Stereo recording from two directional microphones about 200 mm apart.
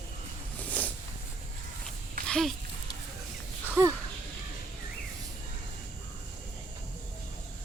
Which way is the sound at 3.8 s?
15° right (ahead or behind).